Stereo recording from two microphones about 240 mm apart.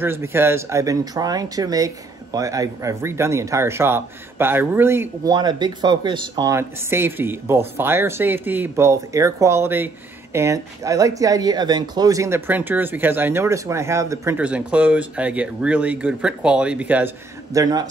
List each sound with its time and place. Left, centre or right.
0.0 s speech: centre